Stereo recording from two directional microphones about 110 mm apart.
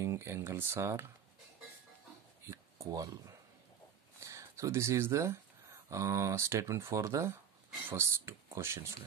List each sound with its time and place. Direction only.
0.0 s speech: 25° right (ahead or behind)
2.4 s a sound: 25° right (ahead or behind)
4.2 s speech: 30° right (ahead or behind)